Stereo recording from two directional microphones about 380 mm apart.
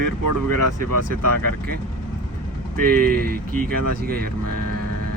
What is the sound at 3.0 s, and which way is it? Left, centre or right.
Speech, right.